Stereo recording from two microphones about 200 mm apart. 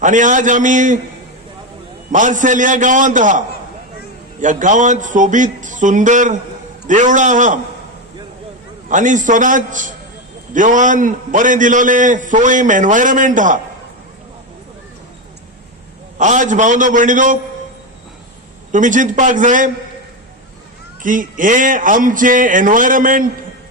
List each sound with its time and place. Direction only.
0.0 s a man's voice: 40° right (ahead or behind)
2.1 s a man's voice: 40° right (ahead or behind)
8.9 s a man's voice: 40° right (ahead or behind)
16.1 s a man's voice: 40° right (ahead or behind)
18.7 s a man's voice: 40° right (ahead or behind)
21.0 s a man's voice: 40° right (ahead or behind)